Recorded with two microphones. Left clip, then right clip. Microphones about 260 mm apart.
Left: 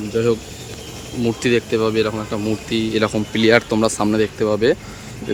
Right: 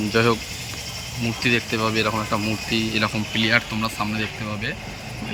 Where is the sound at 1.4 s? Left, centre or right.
Centre.